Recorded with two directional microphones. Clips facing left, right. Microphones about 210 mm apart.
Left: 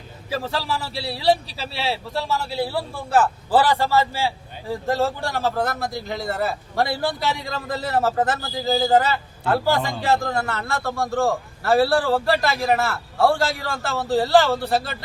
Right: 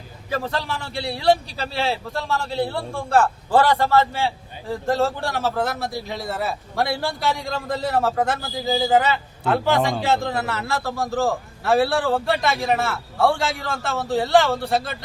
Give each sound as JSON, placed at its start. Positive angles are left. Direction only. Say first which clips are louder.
{"t": 0.3, "sound": "a man's voice", "louder": "even", "side_deg": 5}
{"t": 9.7, "sound": "a man's voice", "louder": "right 4 dB", "side_deg": -70}
{"t": 10.0, "sound": "a man's voice", "louder": "even", "side_deg": 0}